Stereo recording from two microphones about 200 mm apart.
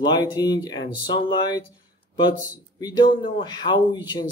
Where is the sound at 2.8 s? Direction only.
20° left (ahead or behind).